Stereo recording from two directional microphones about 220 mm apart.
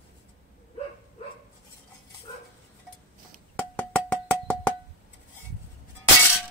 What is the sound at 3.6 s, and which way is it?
Music, 5° left (ahead or behind).